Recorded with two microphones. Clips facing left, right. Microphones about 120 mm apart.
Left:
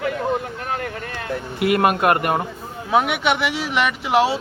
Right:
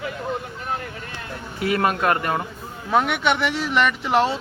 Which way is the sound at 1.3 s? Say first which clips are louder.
Left 5 dB; 70° left (ahead or behind).